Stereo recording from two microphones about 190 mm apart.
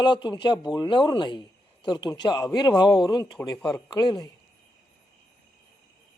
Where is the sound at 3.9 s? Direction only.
20° left (ahead or behind).